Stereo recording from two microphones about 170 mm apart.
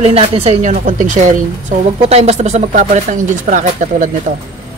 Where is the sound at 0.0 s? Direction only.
35° right (ahead or behind).